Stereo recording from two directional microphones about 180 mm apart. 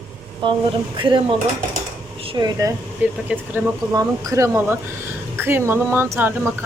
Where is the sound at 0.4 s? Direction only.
25° right (ahead or behind).